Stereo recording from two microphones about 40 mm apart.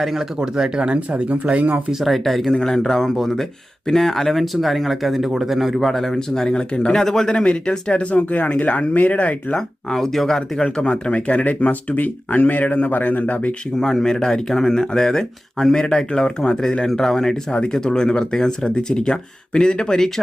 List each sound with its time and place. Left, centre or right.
0.3 s speech: right
0.9 s speech: right
1.9 s a man's voice: centre
5.8 s speech: centre
6.1 s speech: centre
8.1 s speech: left
9.6 s speech: centre
10.8 s speech: left
13.7 s speech: centre